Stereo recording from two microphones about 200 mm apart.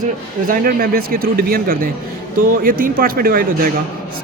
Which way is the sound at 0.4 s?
45° right (ahead or behind).